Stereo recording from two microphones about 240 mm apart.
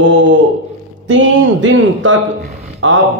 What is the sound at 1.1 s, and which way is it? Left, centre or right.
A man's voice, right.